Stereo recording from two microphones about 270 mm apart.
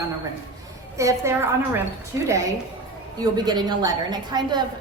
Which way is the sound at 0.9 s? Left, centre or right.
Centre.